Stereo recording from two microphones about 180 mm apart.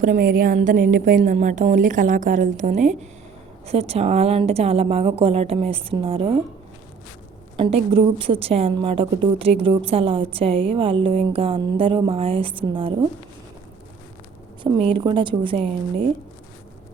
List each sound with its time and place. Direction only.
0.0 s a woman's voice: 50° right (ahead or behind); by 6.3 s 30° right (ahead or behind)
7.5 s a woman's voice: 30° right (ahead or behind)
14.9 s a woman's voice: 30° right (ahead or behind)